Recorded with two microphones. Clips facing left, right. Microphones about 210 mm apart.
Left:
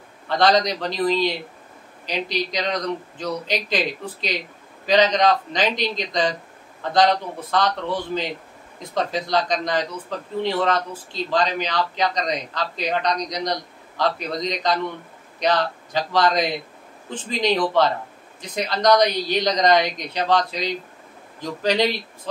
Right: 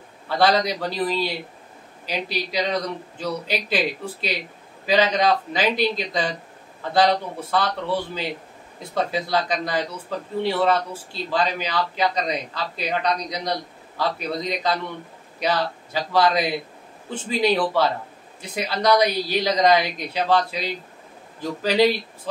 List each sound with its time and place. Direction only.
0.3 s a man's voice: 5° right (ahead or behind)